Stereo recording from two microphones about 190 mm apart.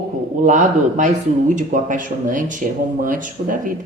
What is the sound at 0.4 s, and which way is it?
A man's voice, 40° right (ahead or behind).